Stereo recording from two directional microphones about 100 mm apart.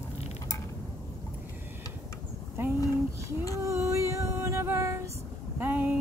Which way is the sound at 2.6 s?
25° right (ahead or behind).